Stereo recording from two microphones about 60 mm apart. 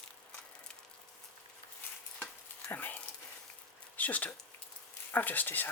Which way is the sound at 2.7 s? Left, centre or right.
Left.